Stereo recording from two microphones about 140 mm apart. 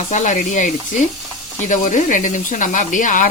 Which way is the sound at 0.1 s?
60° left (ahead or behind).